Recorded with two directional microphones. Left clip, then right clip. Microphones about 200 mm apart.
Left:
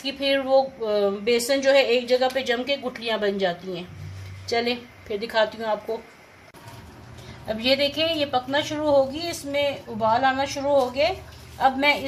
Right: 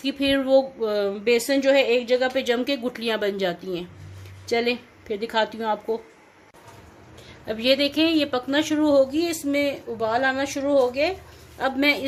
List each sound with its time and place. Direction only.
0.0 s a woman's voice: 35° right (ahead or behind)
7.4 s a woman's voice: 40° right (ahead or behind)